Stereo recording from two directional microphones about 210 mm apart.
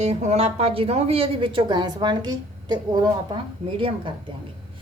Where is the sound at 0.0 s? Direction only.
30° right (ahead or behind).